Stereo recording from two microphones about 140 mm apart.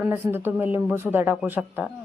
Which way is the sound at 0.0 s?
15° right (ahead or behind).